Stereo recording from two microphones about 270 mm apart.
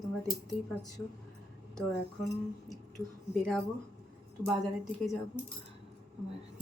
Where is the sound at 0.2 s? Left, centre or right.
Centre.